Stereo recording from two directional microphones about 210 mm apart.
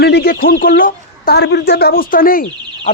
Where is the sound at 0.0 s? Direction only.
50° left (ahead or behind).